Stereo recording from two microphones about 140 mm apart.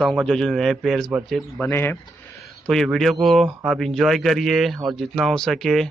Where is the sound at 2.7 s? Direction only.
5° left (ahead or behind).